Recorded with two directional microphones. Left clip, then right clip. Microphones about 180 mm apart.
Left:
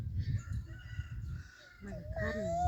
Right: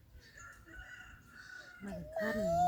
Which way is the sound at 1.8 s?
Centre (ahead or behind).